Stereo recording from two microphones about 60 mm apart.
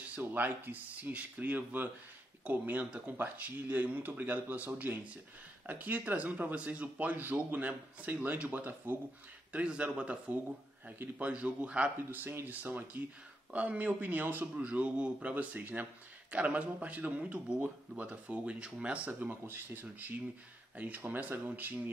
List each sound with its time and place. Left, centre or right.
0.2 s speech: right
12.0 s speech: right
14.5 s speech: right
19.4 s speech: right